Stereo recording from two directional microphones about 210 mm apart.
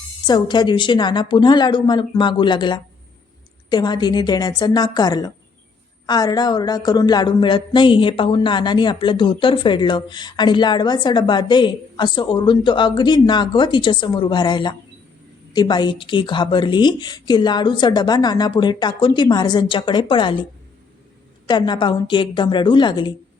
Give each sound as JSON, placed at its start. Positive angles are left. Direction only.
{"t": 0.3, "sound": "speech", "side_deg": 20}